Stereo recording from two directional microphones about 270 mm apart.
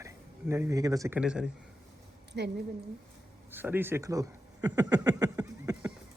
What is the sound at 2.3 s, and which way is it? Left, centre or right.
Speech, right.